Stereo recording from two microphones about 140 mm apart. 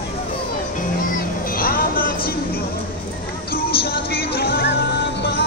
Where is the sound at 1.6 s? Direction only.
90° left.